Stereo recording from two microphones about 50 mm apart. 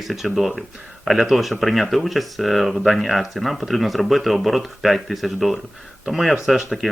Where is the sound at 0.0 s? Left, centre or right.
Centre.